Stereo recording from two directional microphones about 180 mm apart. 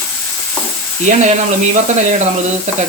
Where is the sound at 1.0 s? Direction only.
40° right (ahead or behind).